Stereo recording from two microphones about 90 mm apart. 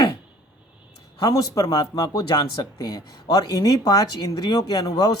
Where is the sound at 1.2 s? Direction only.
40° left (ahead or behind).